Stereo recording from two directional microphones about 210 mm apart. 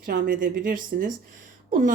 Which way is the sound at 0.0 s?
40° right (ahead or behind).